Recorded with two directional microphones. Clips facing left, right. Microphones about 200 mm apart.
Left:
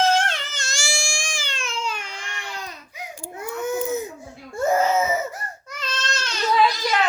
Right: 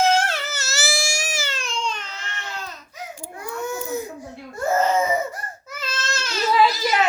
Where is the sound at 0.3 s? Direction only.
5° right (ahead or behind); by 4.0 s 20° left (ahead or behind).